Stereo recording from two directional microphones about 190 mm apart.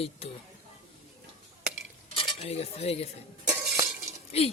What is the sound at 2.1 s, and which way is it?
Cutlery, 30° left (ahead or behind).